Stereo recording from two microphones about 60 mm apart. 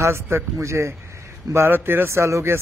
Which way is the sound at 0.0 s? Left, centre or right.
Right.